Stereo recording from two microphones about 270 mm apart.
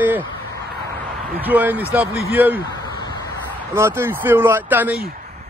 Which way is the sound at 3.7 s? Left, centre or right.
Centre.